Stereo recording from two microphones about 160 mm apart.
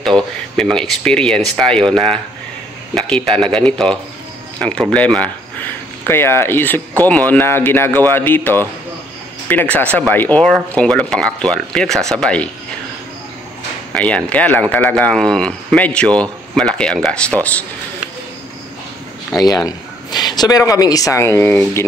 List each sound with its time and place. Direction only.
0.0 s speech: 5° left (ahead or behind)
2.9 s speech: 5° left (ahead or behind)
13.9 s speech: 10° left (ahead or behind)
19.4 s a man's voice: 25° left (ahead or behind)